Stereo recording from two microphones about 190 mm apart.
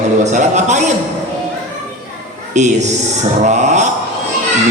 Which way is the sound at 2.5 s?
40° right (ahead or behind).